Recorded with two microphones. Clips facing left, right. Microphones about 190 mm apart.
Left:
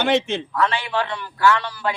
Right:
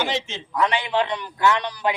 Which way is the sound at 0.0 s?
60° left (ahead or behind).